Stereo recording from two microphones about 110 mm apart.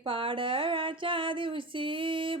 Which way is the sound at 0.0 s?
55° right (ahead or behind).